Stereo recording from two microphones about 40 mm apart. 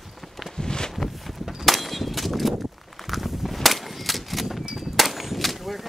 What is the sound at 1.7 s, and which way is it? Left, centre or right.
Clang, centre.